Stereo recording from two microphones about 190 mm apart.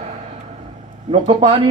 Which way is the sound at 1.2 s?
30° right (ahead or behind).